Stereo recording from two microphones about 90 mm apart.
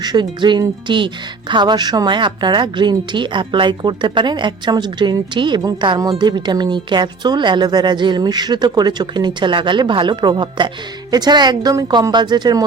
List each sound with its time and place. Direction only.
0.0 s a woman's voice: 55° right (ahead or behind)